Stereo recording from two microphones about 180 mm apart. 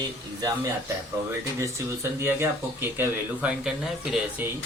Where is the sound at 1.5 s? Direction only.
15° right (ahead or behind).